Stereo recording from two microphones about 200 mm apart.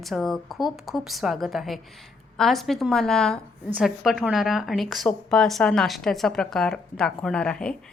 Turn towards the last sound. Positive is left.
turn(degrees=5)  # may be behind; listen again after turning